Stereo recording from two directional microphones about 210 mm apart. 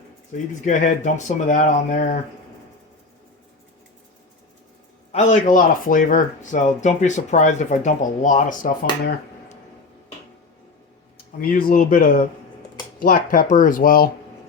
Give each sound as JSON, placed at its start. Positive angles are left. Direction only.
{"t": 0.6, "sound": "speech", "side_deg": 35}
{"t": 5.1, "sound": "speech", "side_deg": 35}
{"t": 11.3, "sound": "speech", "side_deg": 45}